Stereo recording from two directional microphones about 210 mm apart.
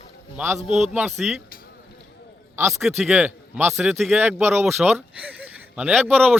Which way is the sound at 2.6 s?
15° right (ahead or behind).